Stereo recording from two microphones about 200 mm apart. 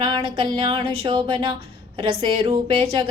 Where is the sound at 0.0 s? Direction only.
25° right (ahead or behind).